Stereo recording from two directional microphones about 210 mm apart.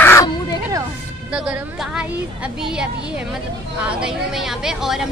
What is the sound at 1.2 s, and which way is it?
A woman's voice, 5° right (ahead or behind).